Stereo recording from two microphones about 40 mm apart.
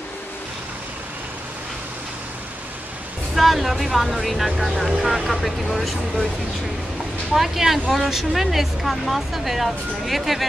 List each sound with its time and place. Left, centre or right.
3.3 s speech: centre
7.3 s speech: centre